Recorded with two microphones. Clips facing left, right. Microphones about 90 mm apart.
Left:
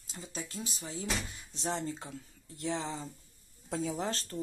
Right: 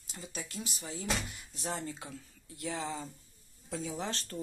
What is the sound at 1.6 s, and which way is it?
Speech, 25° left (ahead or behind).